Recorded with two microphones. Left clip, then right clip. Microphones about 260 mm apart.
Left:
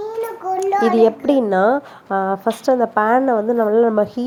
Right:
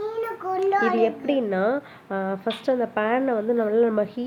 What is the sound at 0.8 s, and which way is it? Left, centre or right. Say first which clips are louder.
Speech: left 7 dB; left.